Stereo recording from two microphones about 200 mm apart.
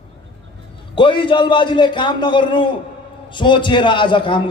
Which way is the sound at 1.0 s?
25° left (ahead or behind).